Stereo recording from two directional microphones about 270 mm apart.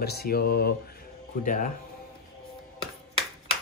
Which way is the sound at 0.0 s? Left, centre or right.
Left.